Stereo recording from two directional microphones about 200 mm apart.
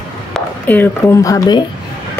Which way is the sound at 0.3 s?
10° left (ahead or behind).